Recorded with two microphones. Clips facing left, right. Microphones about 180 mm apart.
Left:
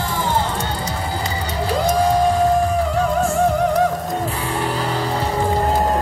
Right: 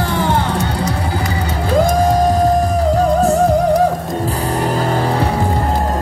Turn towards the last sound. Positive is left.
turn(degrees=-45)  # may be behind; listen again after turning